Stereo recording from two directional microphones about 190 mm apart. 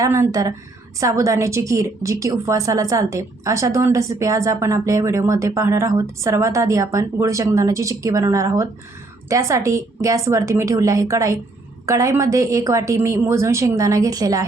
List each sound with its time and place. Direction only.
0.0 s a woman's voice: 15° right (ahead or behind)